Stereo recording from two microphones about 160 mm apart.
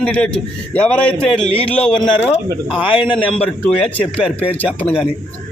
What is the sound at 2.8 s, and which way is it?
Speech, 35° left (ahead or behind).